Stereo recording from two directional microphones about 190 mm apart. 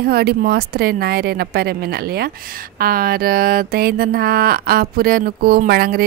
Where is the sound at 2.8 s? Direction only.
50° right (ahead or behind).